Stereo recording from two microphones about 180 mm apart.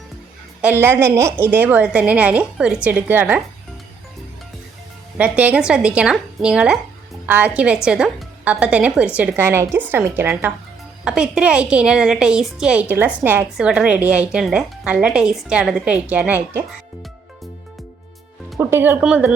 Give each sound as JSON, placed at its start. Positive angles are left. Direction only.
{"t": 0.6, "sound": "a woman's voice", "side_deg": -10}
{"t": 5.1, "sound": "a woman's voice", "side_deg": -5}
{"t": 18.6, "sound": "a woman's voice", "side_deg": -15}